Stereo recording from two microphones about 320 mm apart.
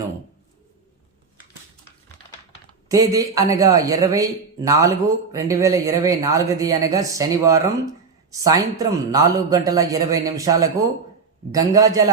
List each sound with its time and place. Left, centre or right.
2.9 s a man's voice: centre